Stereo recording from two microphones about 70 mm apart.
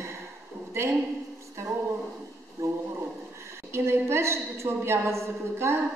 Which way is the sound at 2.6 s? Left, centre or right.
Right.